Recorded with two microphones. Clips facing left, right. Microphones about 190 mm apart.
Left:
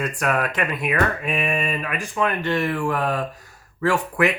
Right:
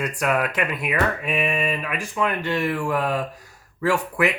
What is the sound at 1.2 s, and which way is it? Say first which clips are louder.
Mantra: even; 45° left (ahead or behind).